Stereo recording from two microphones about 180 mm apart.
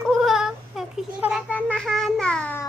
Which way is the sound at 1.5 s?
10° left (ahead or behind).